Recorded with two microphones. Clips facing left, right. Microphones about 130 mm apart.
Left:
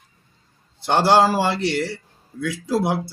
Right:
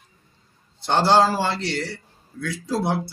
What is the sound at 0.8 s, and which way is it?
A man's voice, 15° left (ahead or behind).